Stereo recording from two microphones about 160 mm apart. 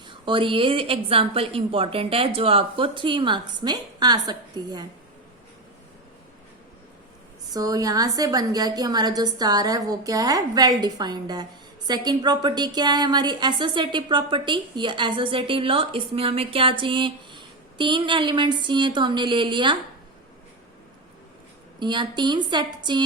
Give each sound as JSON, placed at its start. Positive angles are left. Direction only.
{"t": 0.0, "sound": "a woman's voice", "side_deg": -30}
{"t": 7.5, "sound": "a woman's voice", "side_deg": -20}
{"t": 21.8, "sound": "a woman's voice", "side_deg": -30}